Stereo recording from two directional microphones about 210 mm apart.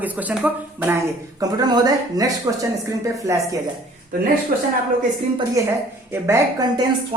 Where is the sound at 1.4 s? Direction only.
20° right (ahead or behind).